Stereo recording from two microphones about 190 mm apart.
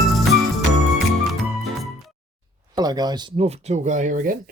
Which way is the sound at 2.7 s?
20° right (ahead or behind).